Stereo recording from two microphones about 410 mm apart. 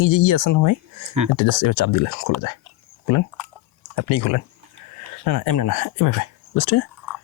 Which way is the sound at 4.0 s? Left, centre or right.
Left.